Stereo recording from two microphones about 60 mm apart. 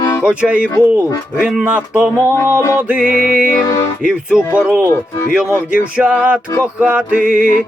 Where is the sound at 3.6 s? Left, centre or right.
Left.